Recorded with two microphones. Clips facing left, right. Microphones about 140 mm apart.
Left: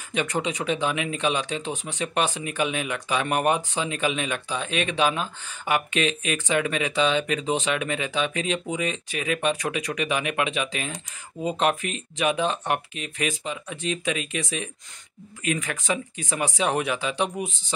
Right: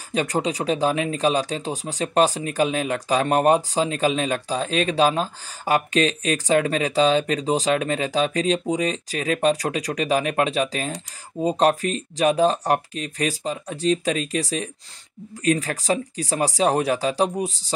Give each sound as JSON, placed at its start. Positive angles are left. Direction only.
{"t": 0.1, "sound": "speech", "side_deg": -35}